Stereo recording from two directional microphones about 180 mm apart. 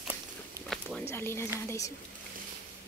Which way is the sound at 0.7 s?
Centre (ahead or behind).